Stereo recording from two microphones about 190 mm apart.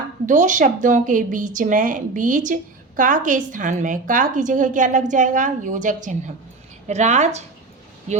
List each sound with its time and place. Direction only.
0.3 s a woman's voice: 40° right (ahead or behind)